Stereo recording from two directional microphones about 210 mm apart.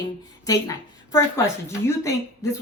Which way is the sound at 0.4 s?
15° left (ahead or behind).